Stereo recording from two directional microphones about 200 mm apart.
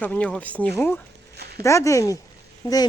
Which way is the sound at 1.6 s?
15° left (ahead or behind).